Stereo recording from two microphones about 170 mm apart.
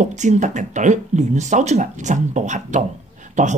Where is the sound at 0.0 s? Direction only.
45° right (ahead or behind).